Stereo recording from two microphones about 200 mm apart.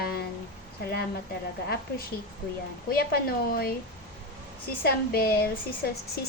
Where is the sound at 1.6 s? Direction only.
50° left (ahead or behind).